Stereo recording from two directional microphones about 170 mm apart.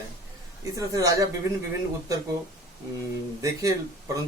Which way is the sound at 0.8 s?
20° right (ahead or behind).